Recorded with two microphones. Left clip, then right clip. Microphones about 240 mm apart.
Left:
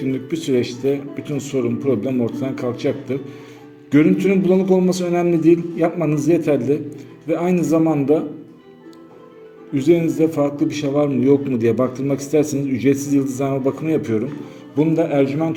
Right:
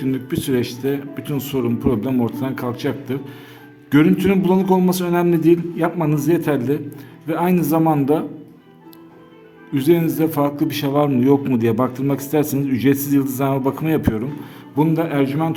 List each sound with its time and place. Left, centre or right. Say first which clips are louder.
0.0 s a man's voice: even; centre
9.7 s a man's voice: left 1 dB; right